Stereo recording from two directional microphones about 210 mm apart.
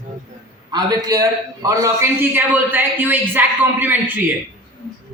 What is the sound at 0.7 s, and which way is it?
A man's voice, 20° right (ahead or behind).